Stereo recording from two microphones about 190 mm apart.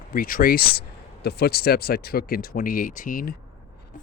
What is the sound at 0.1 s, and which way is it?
Speech, 45° left (ahead or behind).